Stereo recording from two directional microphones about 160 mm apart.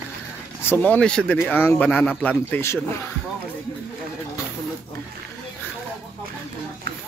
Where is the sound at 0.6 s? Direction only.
10° left (ahead or behind).